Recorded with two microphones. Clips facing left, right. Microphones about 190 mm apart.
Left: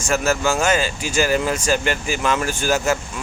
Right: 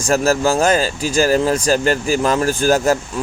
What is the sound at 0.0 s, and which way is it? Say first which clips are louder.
Speech: right 4 dB; 35° right (ahead or behind).